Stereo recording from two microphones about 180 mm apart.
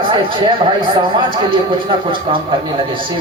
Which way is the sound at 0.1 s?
25° right (ahead or behind).